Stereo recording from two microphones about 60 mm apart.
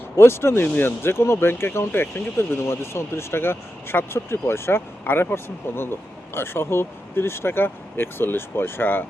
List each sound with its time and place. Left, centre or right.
0.2 s speech: left